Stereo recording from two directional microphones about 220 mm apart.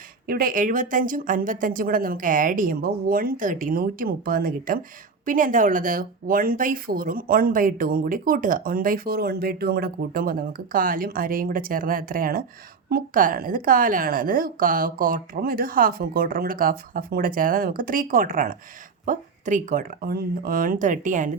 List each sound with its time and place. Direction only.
0.3 s speech: 40° right (ahead or behind)